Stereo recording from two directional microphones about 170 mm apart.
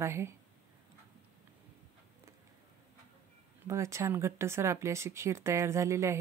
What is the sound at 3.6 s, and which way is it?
Speech, 15° right (ahead or behind).